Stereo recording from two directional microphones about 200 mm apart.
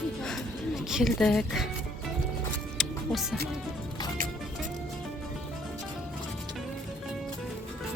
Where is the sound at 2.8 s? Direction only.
Centre (ahead or behind).